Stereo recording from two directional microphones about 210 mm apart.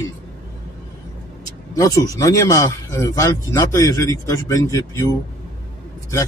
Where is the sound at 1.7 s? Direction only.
15° left (ahead or behind).